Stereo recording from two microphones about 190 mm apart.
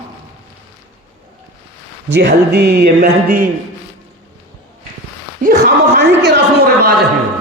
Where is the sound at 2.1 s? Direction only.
60° right (ahead or behind).